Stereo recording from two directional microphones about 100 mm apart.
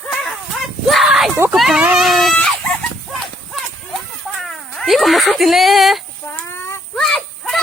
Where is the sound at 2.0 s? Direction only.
Centre (ahead or behind).